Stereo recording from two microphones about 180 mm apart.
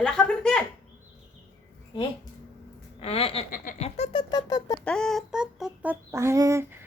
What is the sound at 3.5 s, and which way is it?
Laughter, 45° left (ahead or behind).